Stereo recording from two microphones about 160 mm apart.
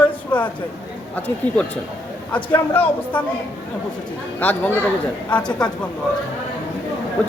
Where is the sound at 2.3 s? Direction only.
10° left (ahead or behind).